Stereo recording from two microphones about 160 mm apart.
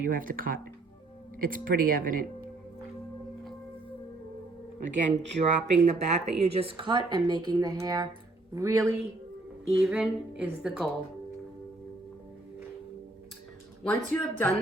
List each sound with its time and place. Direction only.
0.1 s speech: 60° right (ahead or behind)
4.9 s a man's voice: 50° right (ahead or behind); by 9.0 s 20° right (ahead or behind)
9.8 s a woman's voice: 5° right (ahead or behind)
13.8 s speech: 10° left (ahead or behind)